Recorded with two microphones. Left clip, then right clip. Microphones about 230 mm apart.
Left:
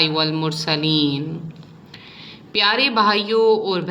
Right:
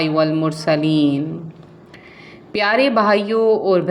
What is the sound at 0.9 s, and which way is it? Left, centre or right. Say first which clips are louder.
Speech: right 2 dB; right.